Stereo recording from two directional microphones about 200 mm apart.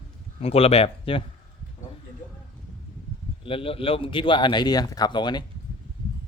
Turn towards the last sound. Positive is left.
turn(degrees=20)  # may be behind; listen again after turning